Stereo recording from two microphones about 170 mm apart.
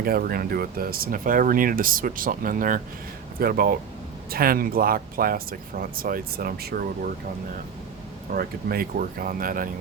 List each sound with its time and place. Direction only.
0.0 s speech: 60° right (ahead or behind)
8.3 s speech: 60° right (ahead or behind)